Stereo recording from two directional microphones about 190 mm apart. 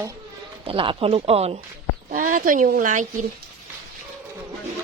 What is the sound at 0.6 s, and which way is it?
Speech, 30° right (ahead or behind).